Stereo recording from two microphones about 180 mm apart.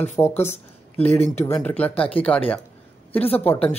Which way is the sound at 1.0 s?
35° left (ahead or behind).